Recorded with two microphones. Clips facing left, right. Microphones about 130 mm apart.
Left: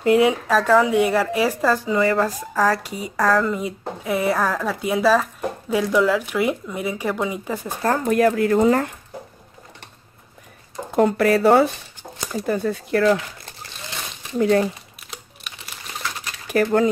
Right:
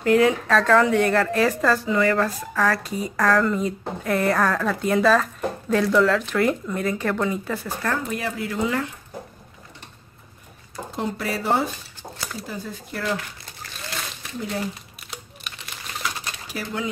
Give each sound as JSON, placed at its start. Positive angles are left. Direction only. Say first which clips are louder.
{"t": 0.0, "sound": "speech", "louder": "left 2 dB", "side_deg": 20}
{"t": 0.5, "sound": "speech", "louder": "left 1 dB", "side_deg": 5}
{"t": 1.9, "sound": "speech", "louder": "left 2 dB", "side_deg": 20}
{"t": 8.0, "sound": "speech", "louder": "left 11 dB", "side_deg": 55}
{"t": 11.0, "sound": "speech", "louder": "left 11 dB", "side_deg": 60}
{"t": 14.4, "sound": "speech", "louder": "left 11 dB", "side_deg": 70}
{"t": 15.0, "sound": "typing", "louder": "right 1 dB", "side_deg": 0}
{"t": 16.4, "sound": "speech", "louder": "left 12 dB", "side_deg": 50}